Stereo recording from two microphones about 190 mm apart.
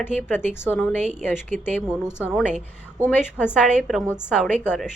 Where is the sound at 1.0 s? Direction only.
35° right (ahead or behind).